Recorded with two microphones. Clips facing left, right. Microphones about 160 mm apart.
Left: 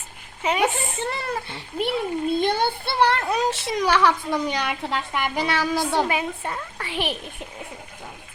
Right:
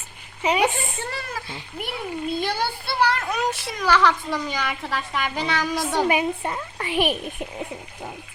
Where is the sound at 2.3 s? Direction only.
20° left (ahead or behind); by 6.0 s 5° left (ahead or behind).